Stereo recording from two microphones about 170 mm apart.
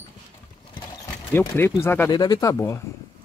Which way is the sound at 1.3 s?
15° left (ahead or behind).